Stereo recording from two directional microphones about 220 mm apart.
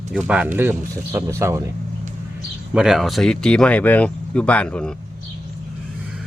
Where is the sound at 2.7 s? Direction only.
5° right (ahead or behind).